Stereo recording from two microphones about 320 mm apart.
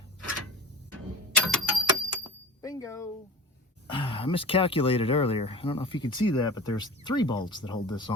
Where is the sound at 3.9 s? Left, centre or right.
Centre.